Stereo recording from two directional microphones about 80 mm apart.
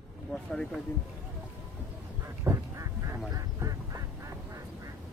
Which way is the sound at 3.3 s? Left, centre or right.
Right.